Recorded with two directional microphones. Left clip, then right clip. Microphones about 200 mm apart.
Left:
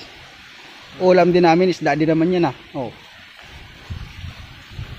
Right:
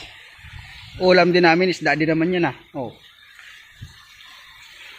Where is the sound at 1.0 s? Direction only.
10° left (ahead or behind).